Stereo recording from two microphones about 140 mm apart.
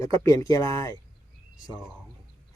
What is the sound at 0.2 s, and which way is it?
Speech, 20° left (ahead or behind).